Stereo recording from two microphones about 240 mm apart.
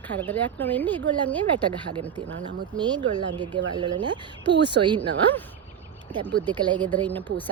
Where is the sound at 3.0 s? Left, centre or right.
Right.